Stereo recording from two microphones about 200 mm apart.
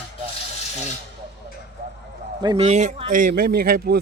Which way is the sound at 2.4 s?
30° right (ahead or behind).